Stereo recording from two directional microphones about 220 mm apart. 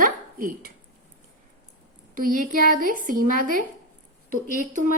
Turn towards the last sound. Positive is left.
turn(degrees=-35)  # may be behind; listen again after turning